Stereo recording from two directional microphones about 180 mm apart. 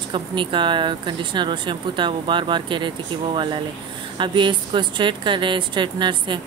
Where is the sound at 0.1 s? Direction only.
25° right (ahead or behind).